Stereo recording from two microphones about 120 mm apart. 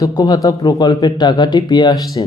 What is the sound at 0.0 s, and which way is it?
A man's voice, 30° left (ahead or behind).